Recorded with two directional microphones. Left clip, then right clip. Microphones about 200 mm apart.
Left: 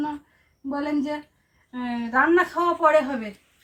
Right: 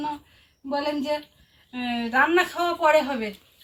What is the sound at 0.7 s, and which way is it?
A woman's voice, 15° right (ahead or behind).